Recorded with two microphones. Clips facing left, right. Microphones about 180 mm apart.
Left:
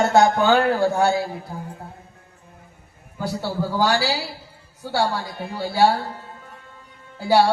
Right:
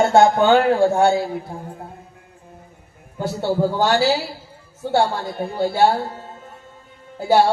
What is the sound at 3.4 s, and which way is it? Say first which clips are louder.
Speech: right 4 dB; 25° right (ahead or behind).